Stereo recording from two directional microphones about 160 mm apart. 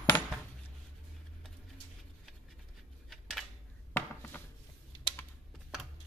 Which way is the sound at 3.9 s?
10° left (ahead or behind).